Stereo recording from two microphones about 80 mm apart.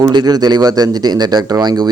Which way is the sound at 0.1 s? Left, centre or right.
Right.